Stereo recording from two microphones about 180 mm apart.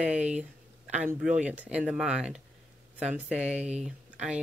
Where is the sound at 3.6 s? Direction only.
40° right (ahead or behind).